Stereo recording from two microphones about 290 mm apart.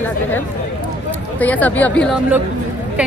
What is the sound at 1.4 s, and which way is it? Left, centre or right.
Speech, centre.